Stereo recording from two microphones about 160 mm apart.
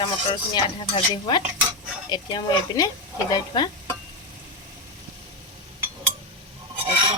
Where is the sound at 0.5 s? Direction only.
25° left (ahead or behind).